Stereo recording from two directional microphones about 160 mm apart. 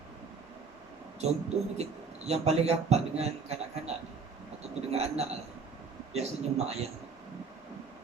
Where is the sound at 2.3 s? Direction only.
40° right (ahead or behind).